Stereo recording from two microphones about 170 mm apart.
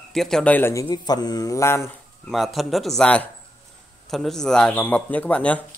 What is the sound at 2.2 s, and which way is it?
A man's voice, centre (ahead or behind).